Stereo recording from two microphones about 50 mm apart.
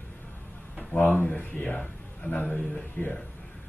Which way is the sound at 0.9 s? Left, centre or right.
Left.